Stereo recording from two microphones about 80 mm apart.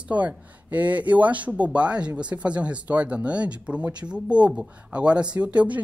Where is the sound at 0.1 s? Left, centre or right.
Centre.